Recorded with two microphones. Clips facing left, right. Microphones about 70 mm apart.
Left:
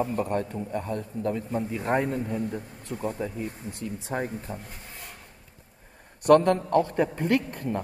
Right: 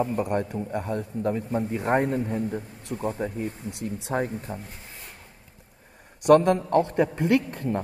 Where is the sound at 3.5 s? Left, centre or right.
Left.